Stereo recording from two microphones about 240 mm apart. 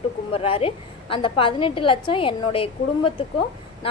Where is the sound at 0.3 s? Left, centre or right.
Left.